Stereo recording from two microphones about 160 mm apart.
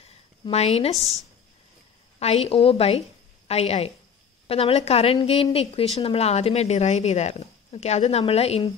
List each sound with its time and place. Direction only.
0.0 s a sound: 40° left (ahead or behind)
0.9 s speech: centre (ahead or behind)
2.1 s a woman's voice: 40° left (ahead or behind)